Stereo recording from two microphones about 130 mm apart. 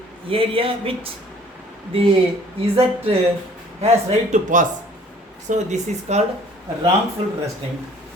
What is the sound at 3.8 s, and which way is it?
Speech, 60° right (ahead or behind).